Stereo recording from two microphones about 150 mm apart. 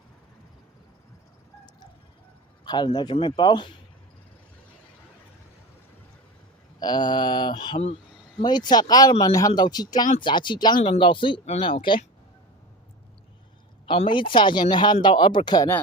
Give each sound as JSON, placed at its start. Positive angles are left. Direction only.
{"t": 2.6, "sound": "speech", "side_deg": 30}
{"t": 6.7, "sound": "speech", "side_deg": 30}
{"t": 13.8, "sound": "speech", "side_deg": 35}